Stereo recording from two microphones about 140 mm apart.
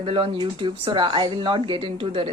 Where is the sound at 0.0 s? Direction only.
40° right (ahead or behind).